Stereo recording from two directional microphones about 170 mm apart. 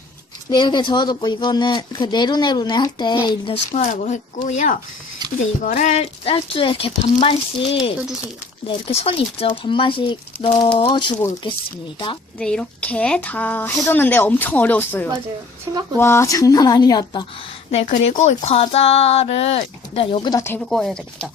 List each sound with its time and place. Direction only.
0.5 s speech: 25° left (ahead or behind)
3.8 s speech: 40° left (ahead or behind)
12.4 s a woman's voice: 5° left (ahead or behind); by 17.2 s 25° left (ahead or behind)
17.7 s speech: 40° left (ahead or behind)
20.7 s speech: centre (ahead or behind)